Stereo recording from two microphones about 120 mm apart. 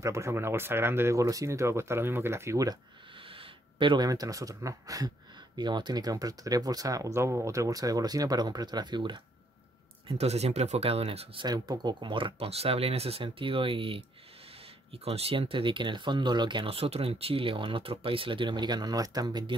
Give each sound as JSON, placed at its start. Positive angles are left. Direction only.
{"t": 0.0, "sound": "speech", "side_deg": -25}
{"t": 3.3, "sound": "speech", "side_deg": -50}
{"t": 10.0, "sound": "speech", "side_deg": -60}
{"t": 11.4, "sound": "speech", "side_deg": -30}